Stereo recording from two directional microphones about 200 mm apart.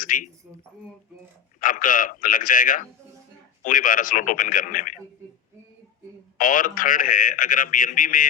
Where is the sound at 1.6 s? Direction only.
40° left (ahead or behind).